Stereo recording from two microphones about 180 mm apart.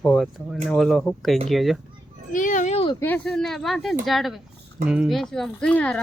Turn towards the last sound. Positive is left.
turn(degrees=5)  # may be behind; listen again after turning